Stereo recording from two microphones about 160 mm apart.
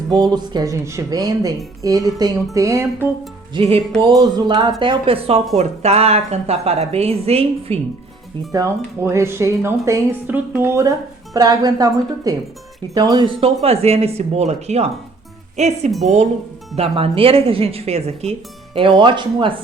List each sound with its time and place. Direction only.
0.1 s speech: 25° right (ahead or behind)
3.5 s speech: 40° right (ahead or behind)
4.0 s speech: 25° right (ahead or behind)
8.5 s speech: 20° right (ahead or behind)